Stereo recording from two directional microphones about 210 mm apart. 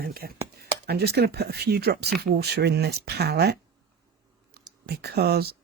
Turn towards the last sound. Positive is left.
turn(degrees=-50)  # may be behind; listen again after turning